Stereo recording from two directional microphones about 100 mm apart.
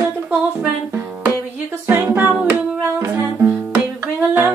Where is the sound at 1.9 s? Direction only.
25° right (ahead or behind).